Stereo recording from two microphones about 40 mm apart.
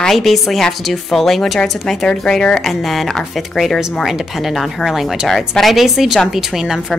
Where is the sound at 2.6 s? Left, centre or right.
Centre.